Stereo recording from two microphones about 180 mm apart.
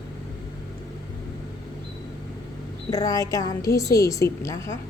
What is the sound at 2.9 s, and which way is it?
A woman's voice, 20° left (ahead or behind).